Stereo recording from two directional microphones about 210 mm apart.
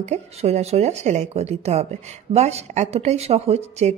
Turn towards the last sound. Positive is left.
turn(degrees=-30)  # may be behind; listen again after turning